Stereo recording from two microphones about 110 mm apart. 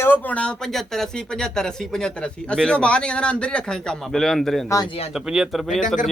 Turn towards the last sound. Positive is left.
turn(degrees=0)  # may be behind; listen again after turning